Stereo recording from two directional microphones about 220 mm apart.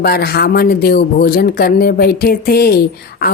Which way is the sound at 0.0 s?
45° left (ahead or behind).